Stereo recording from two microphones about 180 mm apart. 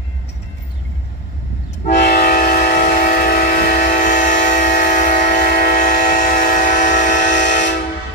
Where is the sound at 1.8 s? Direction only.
50° left (ahead or behind).